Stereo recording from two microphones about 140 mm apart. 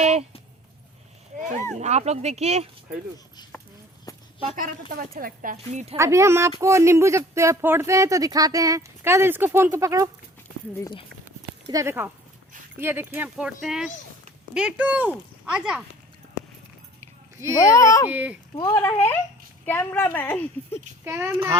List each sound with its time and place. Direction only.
0.0 s a sound: 50° right (ahead or behind)
1.8 s speech: 50° right (ahead or behind)
4.1 s a sound: 25° left (ahead or behind)
4.5 s speech: 85° right
6.0 s speech: 20° right (ahead or behind)
11.7 s speech: 20° right (ahead or behind)
17.6 s a child's voice: 20° left (ahead or behind)
18.1 s speech: 10° right (ahead or behind)
18.7 s a woman's voice: 20° left (ahead or behind)
21.0 s speech: 15° right (ahead or behind)